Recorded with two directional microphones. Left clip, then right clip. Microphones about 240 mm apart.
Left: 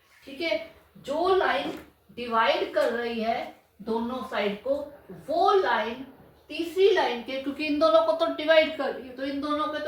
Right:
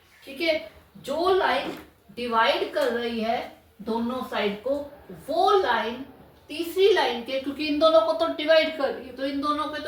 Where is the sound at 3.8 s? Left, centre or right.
Centre.